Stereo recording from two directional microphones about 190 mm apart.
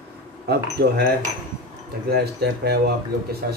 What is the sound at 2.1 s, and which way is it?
Cutlery, 60° right (ahead or behind).